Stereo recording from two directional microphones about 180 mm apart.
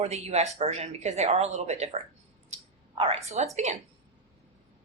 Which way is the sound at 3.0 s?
35° right (ahead or behind).